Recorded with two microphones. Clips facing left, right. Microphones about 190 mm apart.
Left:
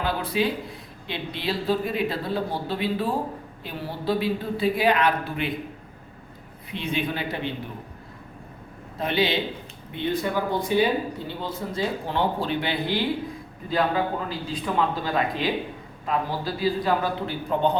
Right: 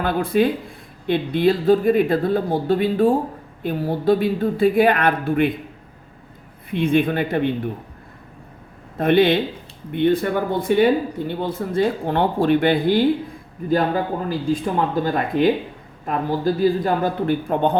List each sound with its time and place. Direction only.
0.0 s speech: 50° right (ahead or behind)
6.7 s speech: 55° right (ahead or behind)
9.0 s speech: 55° right (ahead or behind)